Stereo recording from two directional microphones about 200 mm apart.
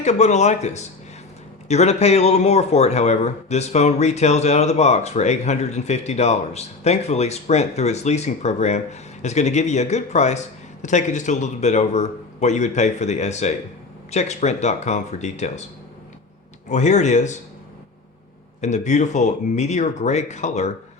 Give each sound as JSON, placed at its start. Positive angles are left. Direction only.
{"t": 0.0, "sound": "a man's voice", "side_deg": 35}
{"t": 16.6, "sound": "a man's voice", "side_deg": 35}
{"t": 18.6, "sound": "a man's voice", "side_deg": 35}